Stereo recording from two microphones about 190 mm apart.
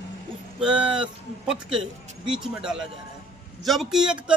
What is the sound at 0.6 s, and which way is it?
Speech, 5° right (ahead or behind).